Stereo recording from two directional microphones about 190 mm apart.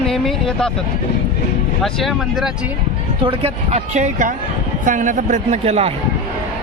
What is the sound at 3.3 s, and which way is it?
A man's voice, 35° right (ahead or behind).